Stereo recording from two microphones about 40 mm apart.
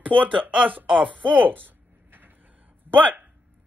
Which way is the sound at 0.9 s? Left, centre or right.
Right.